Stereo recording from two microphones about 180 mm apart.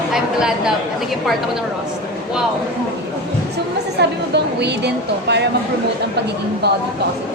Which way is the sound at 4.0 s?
70° right (ahead or behind).